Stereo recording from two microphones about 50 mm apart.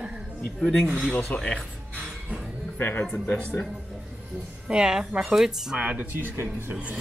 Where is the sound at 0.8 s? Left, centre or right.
Right.